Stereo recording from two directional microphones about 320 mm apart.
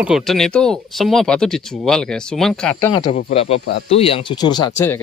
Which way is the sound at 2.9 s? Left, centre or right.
Centre.